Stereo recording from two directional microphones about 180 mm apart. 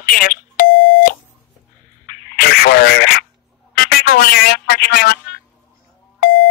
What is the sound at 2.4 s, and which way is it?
Speech, 60° left (ahead or behind).